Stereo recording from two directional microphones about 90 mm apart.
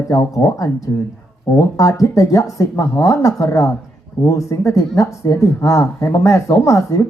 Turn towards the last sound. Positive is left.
turn(degrees=35)  # may be behind; listen again after turning